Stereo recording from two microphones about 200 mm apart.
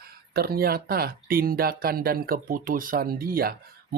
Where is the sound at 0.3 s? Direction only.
50° right (ahead or behind).